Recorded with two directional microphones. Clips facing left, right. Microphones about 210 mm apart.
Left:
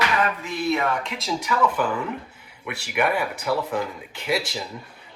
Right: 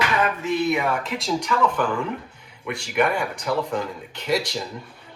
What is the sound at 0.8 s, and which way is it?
Speech, 5° right (ahead or behind).